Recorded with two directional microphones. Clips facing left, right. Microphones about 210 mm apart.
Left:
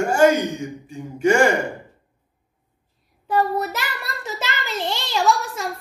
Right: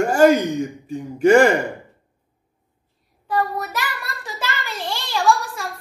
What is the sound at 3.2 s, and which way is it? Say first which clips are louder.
Child singing: left 2 dB; 25° left (ahead or behind).